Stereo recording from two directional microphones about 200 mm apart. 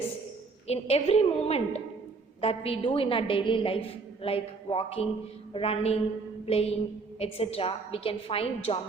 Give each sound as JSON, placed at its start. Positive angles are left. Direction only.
{"t": 0.7, "sound": "a woman's voice", "side_deg": 30}